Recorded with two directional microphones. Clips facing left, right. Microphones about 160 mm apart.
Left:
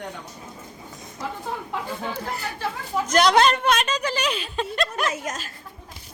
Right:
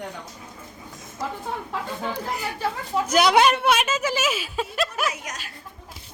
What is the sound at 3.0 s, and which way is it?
Speech, 10° right (ahead or behind).